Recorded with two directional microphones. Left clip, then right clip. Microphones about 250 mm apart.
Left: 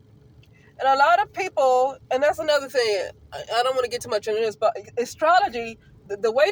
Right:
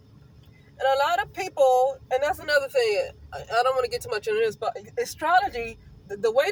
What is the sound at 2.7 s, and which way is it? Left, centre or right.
Speech, left.